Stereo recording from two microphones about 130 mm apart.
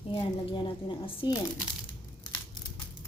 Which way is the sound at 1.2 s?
40° left (ahead or behind).